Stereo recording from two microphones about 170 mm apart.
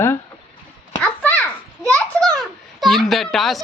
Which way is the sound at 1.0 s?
10° left (ahead or behind).